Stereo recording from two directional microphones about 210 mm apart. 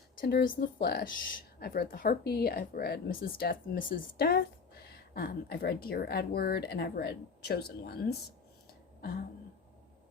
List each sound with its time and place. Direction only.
0.2 s speech: 45° left (ahead or behind)